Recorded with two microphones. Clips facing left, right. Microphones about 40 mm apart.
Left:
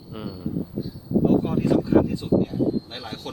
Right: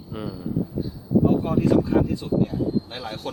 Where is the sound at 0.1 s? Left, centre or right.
Centre.